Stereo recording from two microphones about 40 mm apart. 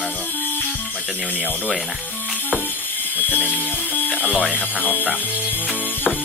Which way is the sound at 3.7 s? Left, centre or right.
Left.